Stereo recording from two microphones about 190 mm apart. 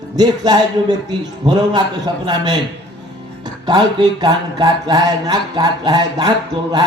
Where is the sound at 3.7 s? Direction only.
20° right (ahead or behind).